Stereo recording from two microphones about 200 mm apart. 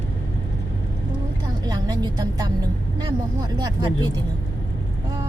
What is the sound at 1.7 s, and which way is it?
Music, 20° right (ahead or behind).